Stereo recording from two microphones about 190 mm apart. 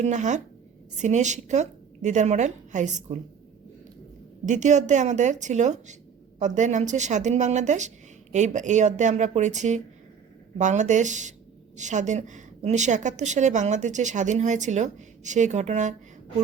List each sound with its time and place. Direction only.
0.0 s a woman's voice: 40° right (ahead or behind)
4.4 s a woman's voice: 40° right (ahead or behind)